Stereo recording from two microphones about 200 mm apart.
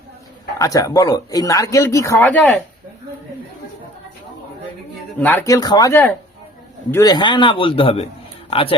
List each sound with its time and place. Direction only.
0.6 s speech: 15° left (ahead or behind)
5.2 s a man's voice: 10° left (ahead or behind); by 8.7 s 30° left (ahead or behind)